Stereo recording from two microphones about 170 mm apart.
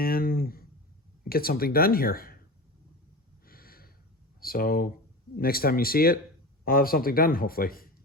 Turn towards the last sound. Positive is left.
turn(degrees=60)  # may be behind; listen again after turning